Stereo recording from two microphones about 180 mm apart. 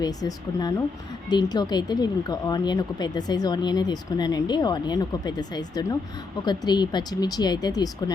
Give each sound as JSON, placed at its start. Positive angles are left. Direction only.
{"t": 0.0, "sound": "speech", "side_deg": 20}